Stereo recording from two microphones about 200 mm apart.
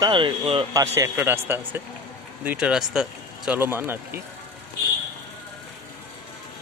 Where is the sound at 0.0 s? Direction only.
25° right (ahead or behind).